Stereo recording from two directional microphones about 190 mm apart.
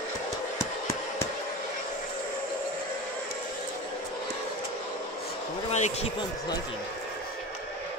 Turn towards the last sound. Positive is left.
turn(degrees=35)  # may be behind; listen again after turning